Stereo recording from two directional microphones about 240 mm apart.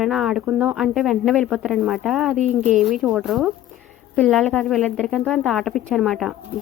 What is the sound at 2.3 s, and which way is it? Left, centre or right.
Speech, right.